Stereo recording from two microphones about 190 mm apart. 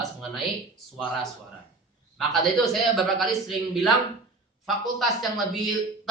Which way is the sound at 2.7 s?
Centre (ahead or behind).